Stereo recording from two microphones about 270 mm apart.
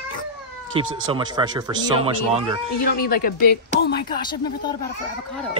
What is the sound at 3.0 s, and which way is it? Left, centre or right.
Speech, left.